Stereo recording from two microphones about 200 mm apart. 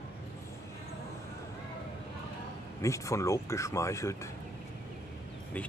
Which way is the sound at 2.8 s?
15° left (ahead or behind).